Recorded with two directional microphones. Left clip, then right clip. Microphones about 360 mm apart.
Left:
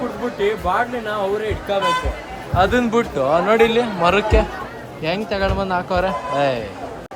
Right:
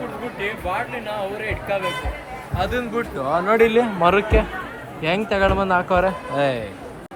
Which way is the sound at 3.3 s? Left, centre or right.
Centre.